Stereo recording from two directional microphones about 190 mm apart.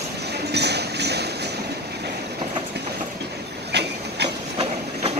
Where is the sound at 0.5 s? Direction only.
60° right (ahead or behind).